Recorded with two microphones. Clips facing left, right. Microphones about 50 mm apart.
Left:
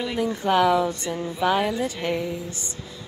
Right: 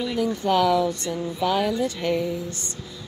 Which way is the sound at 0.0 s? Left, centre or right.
Centre.